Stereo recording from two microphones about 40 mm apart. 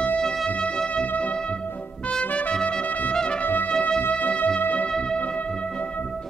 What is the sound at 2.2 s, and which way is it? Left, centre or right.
Trumpet, left.